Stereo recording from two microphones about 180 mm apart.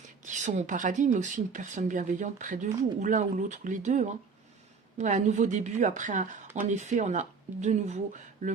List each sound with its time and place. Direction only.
0.3 s speech: 40° right (ahead or behind)